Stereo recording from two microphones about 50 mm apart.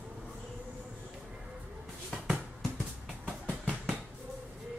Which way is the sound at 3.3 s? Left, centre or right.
Right.